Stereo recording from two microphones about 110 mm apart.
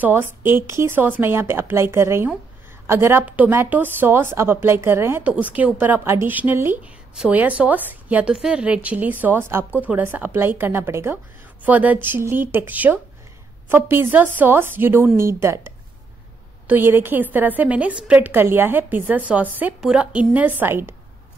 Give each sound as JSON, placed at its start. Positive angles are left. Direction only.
{"t": 0.0, "sound": "a woman's voice", "side_deg": -20}
{"t": 16.6, "sound": "a woman's voice", "side_deg": -20}